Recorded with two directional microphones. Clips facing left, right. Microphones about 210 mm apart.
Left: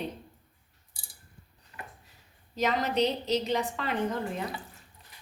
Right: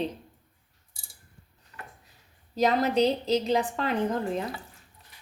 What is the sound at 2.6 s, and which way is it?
Speech, 35° right (ahead or behind).